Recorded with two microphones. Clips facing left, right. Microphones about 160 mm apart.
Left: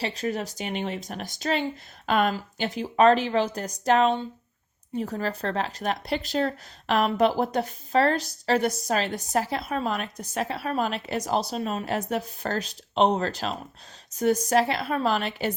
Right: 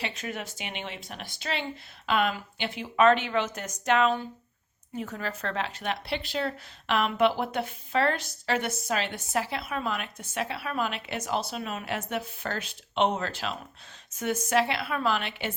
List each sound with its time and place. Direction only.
0.0 s speech: 35° left (ahead or behind)